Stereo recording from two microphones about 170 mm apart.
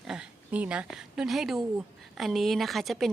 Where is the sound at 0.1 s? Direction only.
5° right (ahead or behind).